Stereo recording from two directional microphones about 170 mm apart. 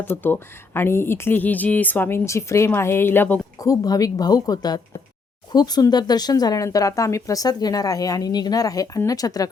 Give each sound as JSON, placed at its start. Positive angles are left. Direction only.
{"t": 0.0, "sound": "speech", "side_deg": 10}